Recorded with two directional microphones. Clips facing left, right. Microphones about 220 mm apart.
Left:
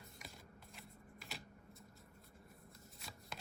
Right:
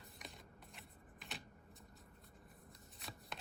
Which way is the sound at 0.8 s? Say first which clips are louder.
Left 2 dB; centre (ahead or behind).